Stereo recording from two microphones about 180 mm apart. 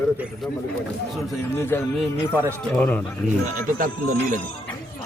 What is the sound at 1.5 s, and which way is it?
Speech, 15° left (ahead or behind).